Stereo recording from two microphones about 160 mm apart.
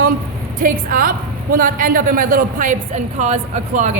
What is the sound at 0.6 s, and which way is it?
A woman's voice, 60° right (ahead or behind).